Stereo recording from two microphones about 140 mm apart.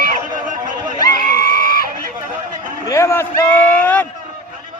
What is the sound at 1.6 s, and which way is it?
Fowl, 90° left.